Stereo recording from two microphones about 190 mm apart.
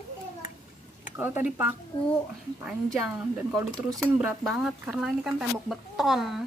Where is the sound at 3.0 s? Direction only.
5° right (ahead or behind).